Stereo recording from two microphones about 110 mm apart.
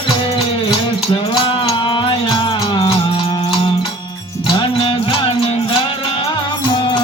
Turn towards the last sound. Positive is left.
turn(degrees=45)  # may be behind; listen again after turning